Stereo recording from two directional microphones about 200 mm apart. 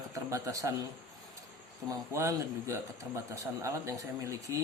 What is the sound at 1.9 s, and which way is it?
A man's voice, 15° right (ahead or behind).